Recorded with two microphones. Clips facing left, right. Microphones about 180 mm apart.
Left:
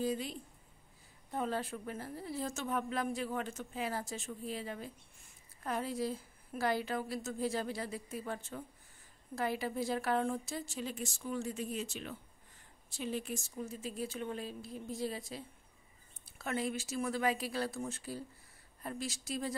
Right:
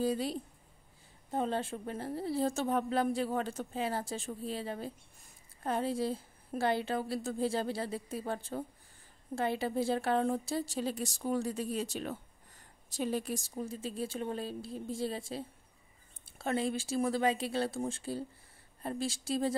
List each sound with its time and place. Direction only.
0.0 s a woman's voice: 35° right (ahead or behind)